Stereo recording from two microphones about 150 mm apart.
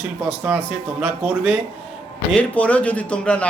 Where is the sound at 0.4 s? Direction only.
15° right (ahead or behind).